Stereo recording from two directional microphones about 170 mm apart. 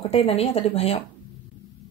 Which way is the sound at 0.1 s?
35° left (ahead or behind).